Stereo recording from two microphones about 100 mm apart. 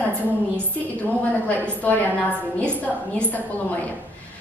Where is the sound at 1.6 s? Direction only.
15° left (ahead or behind).